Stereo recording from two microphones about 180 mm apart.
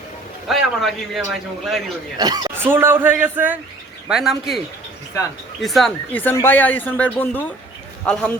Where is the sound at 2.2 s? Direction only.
20° right (ahead or behind); by 4.6 s centre (ahead or behind).